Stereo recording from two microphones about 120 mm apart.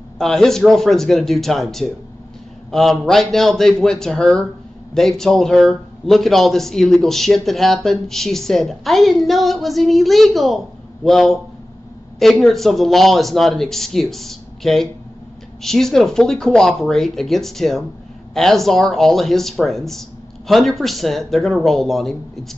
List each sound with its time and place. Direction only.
0.2 s a man's voice: 5° left (ahead or behind)